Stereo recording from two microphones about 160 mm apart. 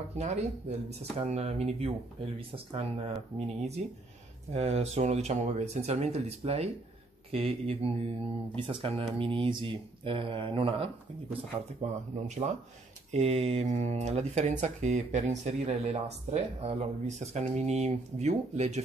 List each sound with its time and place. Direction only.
0.2 s speech: 45° right (ahead or behind)
11.8 s speech: 45° right (ahead or behind)